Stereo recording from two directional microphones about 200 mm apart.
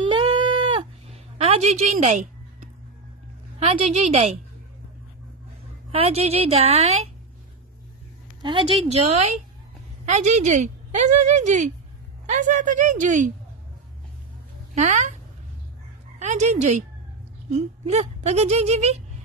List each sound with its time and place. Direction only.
0.1 s bleat: 25° right (ahead or behind)
3.5 s a woman's voice: 30° right (ahead or behind)
5.9 s a woman's voice: 30° right (ahead or behind)
8.4 s a woman's voice: 25° right (ahead or behind)
14.8 s a woman's voice: 35° right (ahead or behind)
16.2 s a woman's voice: 35° right (ahead or behind)